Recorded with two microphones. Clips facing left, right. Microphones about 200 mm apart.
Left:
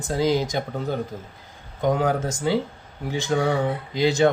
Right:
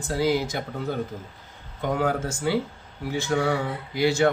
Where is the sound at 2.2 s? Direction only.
20° left (ahead or behind).